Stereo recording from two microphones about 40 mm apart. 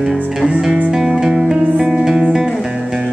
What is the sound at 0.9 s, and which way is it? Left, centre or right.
Music, centre.